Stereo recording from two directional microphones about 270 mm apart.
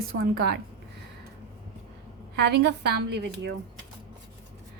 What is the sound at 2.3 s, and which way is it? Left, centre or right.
A woman's voice, right.